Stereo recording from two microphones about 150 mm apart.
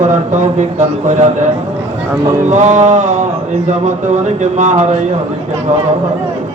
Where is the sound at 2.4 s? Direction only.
55° right (ahead or behind).